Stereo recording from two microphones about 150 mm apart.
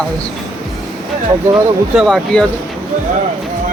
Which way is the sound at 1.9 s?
Centre (ahead or behind).